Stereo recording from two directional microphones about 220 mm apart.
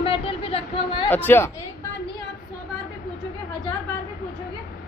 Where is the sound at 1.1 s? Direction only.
10° left (ahead or behind).